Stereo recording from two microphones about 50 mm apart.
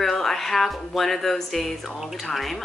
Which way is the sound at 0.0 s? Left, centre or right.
Centre.